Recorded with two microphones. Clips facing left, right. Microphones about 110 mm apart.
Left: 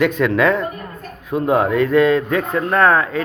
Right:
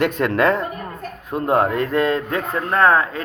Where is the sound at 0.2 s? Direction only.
45° right (ahead or behind).